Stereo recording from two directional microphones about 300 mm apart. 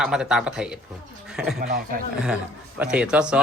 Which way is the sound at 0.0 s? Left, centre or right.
Centre.